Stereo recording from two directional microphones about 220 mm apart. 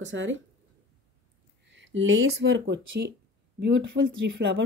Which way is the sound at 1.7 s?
55° right (ahead or behind).